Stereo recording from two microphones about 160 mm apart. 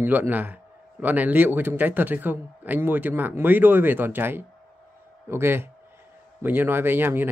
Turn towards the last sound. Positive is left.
turn(degrees=-15)  # may be behind; listen again after turning